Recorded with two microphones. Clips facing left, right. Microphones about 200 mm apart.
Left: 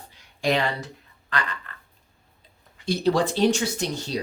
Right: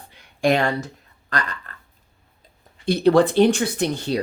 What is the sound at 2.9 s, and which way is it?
Speech, 60° right (ahead or behind).